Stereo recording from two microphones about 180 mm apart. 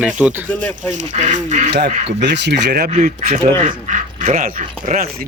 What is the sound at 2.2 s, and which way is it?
Speech, 75° right (ahead or behind).